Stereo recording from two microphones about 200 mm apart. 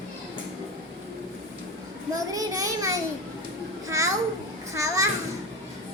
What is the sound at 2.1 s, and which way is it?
A child's voice, 15° right (ahead or behind).